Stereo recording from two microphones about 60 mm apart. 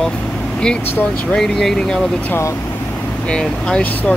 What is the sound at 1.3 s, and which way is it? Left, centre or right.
Speech, centre.